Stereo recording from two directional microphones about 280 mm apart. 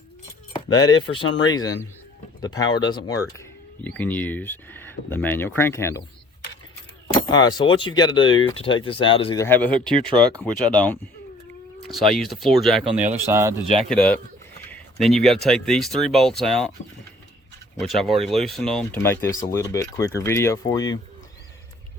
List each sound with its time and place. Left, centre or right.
0.7 s speech: centre
7.1 s a sound: centre
7.7 s speech: centre
13.7 s speech: centre
14.7 s a sound: centre
15.4 s speech: centre
17.7 s speech: centre